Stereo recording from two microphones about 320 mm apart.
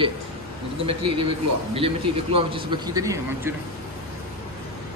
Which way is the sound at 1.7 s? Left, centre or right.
Centre.